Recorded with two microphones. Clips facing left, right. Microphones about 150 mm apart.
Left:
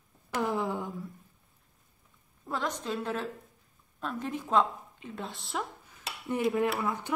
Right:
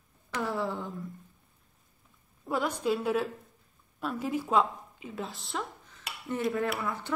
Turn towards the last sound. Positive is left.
turn(degrees=15)  # may be behind; listen again after turning